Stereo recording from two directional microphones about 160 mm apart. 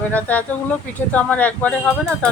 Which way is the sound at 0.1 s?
10° left (ahead or behind).